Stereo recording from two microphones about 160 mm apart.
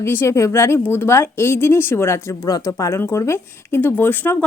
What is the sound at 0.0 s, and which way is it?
Speech, 15° left (ahead or behind).